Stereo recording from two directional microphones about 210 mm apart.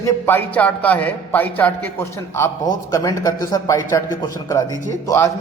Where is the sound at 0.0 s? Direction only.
10° left (ahead or behind).